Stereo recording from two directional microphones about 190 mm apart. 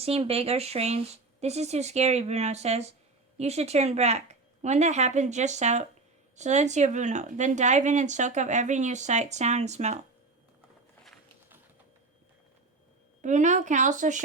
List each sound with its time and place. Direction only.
0.0 s speech: 30° right (ahead or behind)
13.2 s speech: 40° right (ahead or behind)